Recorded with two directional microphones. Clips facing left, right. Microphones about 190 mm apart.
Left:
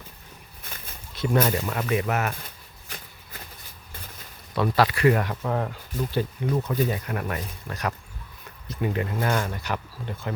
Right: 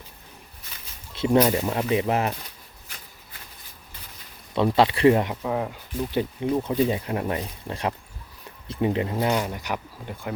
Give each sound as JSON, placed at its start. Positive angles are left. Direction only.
{"t": 1.1, "sound": "a sound", "side_deg": -25}
{"t": 1.4, "sound": "speech", "side_deg": -20}
{"t": 4.5, "sound": "speech", "side_deg": -25}
{"t": 5.4, "sound": "speech", "side_deg": -10}
{"t": 6.1, "sound": "speech", "side_deg": -20}